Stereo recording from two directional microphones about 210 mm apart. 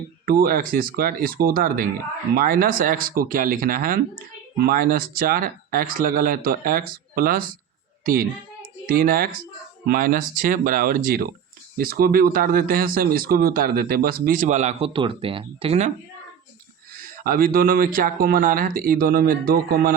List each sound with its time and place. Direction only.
0.3 s a child's voice: 45° right (ahead or behind); by 15.9 s 30° right (ahead or behind)
17.0 s speech: 45° right (ahead or behind)